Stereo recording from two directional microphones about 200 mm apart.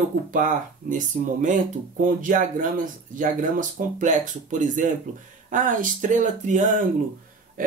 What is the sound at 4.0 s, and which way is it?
Speech, 40° right (ahead or behind).